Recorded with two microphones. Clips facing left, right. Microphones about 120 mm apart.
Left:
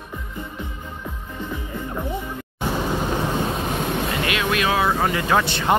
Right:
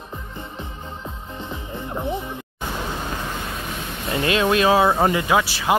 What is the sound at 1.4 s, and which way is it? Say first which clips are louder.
Music: left 2 dB; 25° right (ahead or behind).